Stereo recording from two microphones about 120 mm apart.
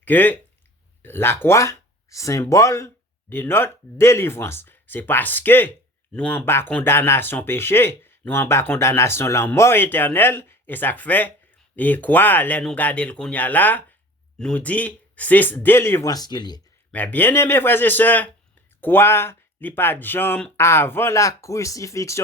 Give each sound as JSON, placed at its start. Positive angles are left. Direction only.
{"t": 0.0, "sound": "speech", "side_deg": 15}
{"t": 16.0, "sound": "speech", "side_deg": 35}
{"t": 16.9, "sound": "speech", "side_deg": 15}